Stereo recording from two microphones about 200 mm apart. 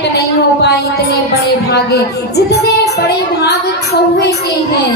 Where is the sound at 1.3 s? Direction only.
55° left (ahead or behind).